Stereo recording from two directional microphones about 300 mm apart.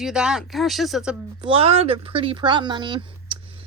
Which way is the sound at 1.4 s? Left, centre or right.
Centre.